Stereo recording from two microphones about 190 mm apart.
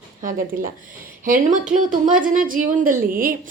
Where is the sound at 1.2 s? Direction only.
45° right (ahead or behind).